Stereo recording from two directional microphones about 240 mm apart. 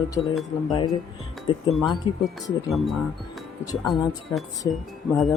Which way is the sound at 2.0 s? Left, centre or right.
Centre.